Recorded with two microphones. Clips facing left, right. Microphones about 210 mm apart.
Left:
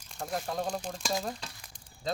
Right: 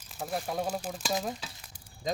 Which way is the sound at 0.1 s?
5° right (ahead or behind).